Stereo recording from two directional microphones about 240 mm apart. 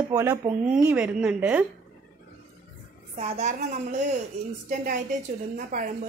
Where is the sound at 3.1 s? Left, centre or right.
Right.